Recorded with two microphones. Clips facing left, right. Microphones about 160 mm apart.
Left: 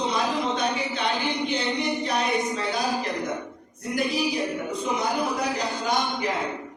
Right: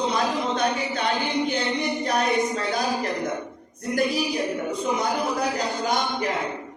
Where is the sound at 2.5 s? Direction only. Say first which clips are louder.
Right 2 dB; 50° right (ahead or behind).